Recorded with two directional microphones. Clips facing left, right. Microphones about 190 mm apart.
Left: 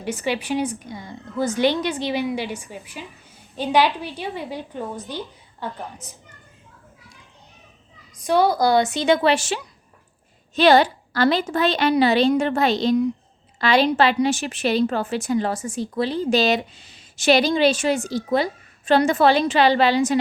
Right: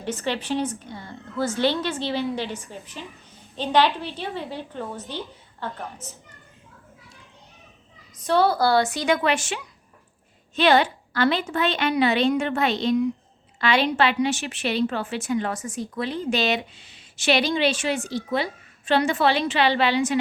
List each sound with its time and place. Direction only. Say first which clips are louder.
0.0 s a woman's voice: left 2 dB; 10° left (ahead or behind)
8.1 s a woman's voice: left 2 dB; 15° left (ahead or behind); by 20.1 s 40° left (ahead or behind)